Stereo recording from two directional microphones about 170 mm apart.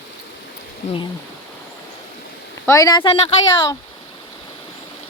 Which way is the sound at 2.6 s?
20° left (ahead or behind).